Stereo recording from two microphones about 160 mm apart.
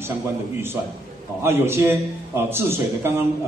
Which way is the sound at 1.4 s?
15° right (ahead or behind).